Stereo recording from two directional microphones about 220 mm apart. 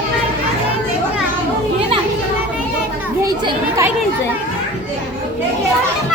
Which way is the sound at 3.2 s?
15° right (ahead or behind).